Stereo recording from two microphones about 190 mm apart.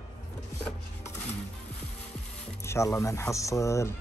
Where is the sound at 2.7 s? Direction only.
15° left (ahead or behind).